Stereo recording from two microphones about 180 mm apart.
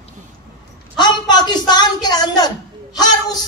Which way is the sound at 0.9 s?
25° left (ahead or behind).